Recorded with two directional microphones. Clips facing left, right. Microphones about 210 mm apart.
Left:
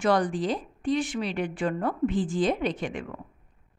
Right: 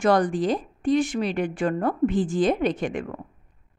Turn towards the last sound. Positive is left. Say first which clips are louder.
# right 5 dB
turn(degrees=-45)  # may be behind; listen again after turning